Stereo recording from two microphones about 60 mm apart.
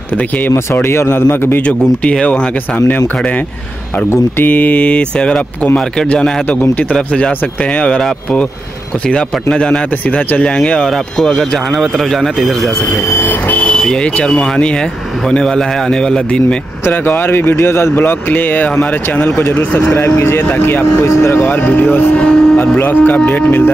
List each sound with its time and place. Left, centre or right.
0.8 s speech: left
1.7 s speech: centre
4.5 s speech: left; by 12.5 s centre
13.5 s vehicle: left
14.2 s speech: centre
16.8 s speech: left
20.0 s speech: left
21.5 s speech: left
22.2 s speech: centre
22.8 s speech: left